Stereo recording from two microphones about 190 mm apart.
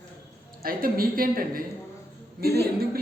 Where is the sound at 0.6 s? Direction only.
50° right (ahead or behind).